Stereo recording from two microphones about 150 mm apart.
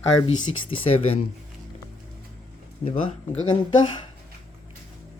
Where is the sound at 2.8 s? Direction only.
40° left (ahead or behind).